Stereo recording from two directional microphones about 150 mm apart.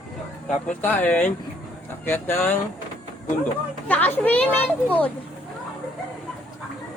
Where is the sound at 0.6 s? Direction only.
10° left (ahead or behind).